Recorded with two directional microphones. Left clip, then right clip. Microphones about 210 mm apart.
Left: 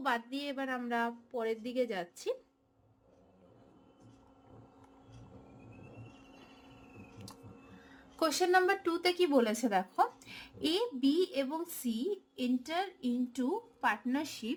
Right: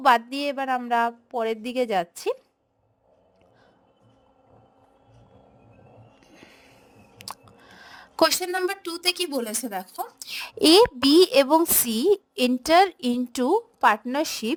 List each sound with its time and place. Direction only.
0.0 s a woman's voice: 50° right (ahead or behind)
7.2 s chewing: 45° right (ahead or behind)
7.9 s a sound: 50° right (ahead or behind)
8.4 s speech: centre (ahead or behind)
10.2 s a woman's voice: 55° right (ahead or behind)